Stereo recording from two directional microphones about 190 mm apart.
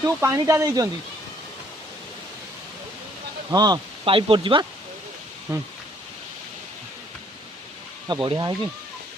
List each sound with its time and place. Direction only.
0.2 s speech: 15° right (ahead or behind)
3.5 s speech: 20° right (ahead or behind)
5.5 s speech: 15° right (ahead or behind)
8.0 s speech: 25° right (ahead or behind)